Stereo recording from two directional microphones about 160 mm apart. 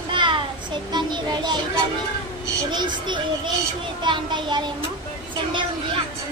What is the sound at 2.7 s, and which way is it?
Speech, 25° right (ahead or behind).